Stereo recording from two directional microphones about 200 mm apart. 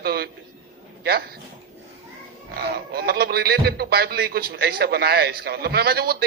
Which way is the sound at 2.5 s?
50° right (ahead or behind).